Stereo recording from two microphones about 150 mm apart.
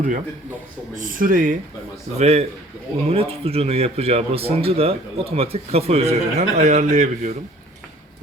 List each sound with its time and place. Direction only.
0.9 s speech: 65° right (ahead or behind)
2.1 s speech: 45° right (ahead or behind)